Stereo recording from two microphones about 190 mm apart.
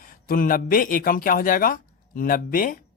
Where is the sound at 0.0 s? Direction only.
50° left (ahead or behind).